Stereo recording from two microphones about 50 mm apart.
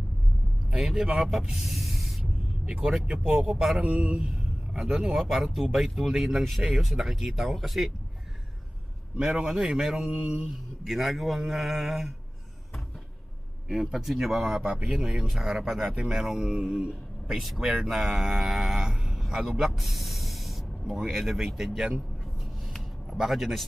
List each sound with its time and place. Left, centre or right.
0.7 s speech: centre
2.6 s speech: right
3.3 s speech: centre
3.8 s speech: right; by 7.9 s centre
9.1 s speech: centre
10.0 s mantra: centre
10.8 s speech: centre
13.8 s speech: centre
16.0 s speech: centre
17.3 s speech: centre
18.9 s snake: centre
20.9 s speech: centre
23.0 s speech: centre